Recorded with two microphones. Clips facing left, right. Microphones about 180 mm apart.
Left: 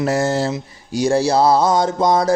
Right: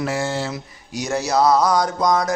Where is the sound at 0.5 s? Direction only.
30° left (ahead or behind).